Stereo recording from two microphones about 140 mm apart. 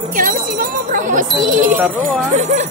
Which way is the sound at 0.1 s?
80° right.